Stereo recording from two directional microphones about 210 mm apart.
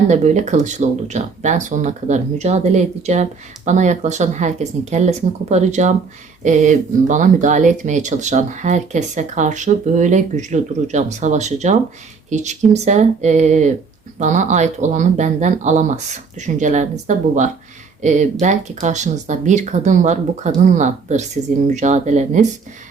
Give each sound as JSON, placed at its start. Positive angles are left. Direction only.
{"t": 0.1, "sound": "speech", "side_deg": -35}